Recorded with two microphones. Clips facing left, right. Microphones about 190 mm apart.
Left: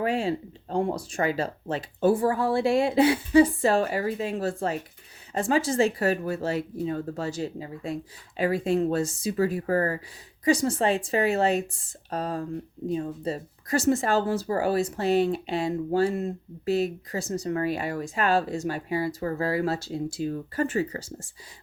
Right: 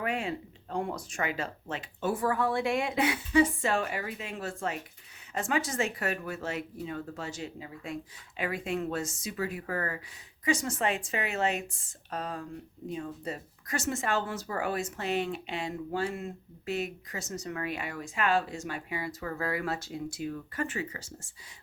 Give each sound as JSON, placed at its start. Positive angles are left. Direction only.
{"t": 0.0, "sound": "speech", "side_deg": 30}